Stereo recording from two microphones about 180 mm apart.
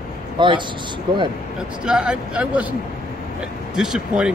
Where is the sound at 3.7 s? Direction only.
5° right (ahead or behind).